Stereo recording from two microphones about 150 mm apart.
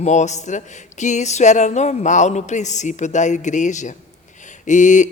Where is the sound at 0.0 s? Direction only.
50° left (ahead or behind).